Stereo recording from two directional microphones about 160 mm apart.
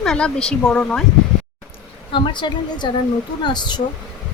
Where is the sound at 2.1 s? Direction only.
30° left (ahead or behind).